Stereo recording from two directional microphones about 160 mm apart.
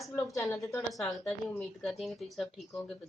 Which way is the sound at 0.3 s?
20° left (ahead or behind).